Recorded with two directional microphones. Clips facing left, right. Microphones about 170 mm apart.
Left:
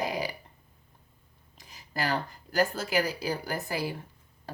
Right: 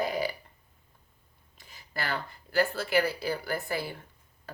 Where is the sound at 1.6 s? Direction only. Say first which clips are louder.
Left 4 dB; 40° left (ahead or behind).